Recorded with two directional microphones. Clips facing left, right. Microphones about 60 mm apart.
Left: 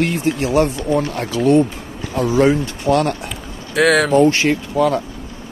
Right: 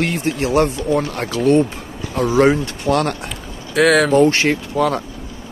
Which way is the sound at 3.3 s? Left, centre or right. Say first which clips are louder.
Even; centre.